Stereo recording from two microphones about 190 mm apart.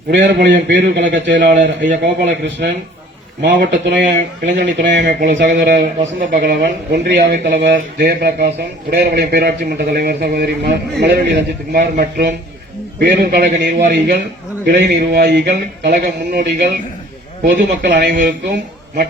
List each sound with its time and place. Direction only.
0.1 s a man's voice: 65° right (ahead or behind)
5.7 s speech: 40° right (ahead or behind)
6.4 s a man's voice: 55° right (ahead or behind)
17.8 s speech: 65° right (ahead or behind)